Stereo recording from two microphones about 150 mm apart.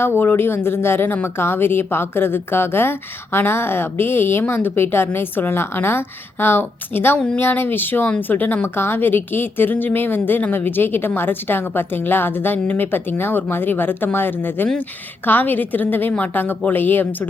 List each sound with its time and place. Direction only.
0.0 s a woman's voice: 15° left (ahead or behind)